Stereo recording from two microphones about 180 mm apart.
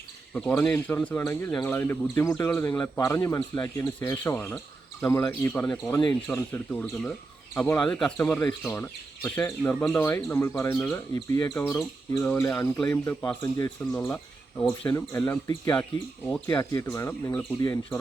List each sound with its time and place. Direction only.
0.6 s speech: 10° left (ahead or behind)